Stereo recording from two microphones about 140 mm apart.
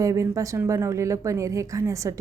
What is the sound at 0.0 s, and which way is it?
A woman's voice, 20° right (ahead or behind).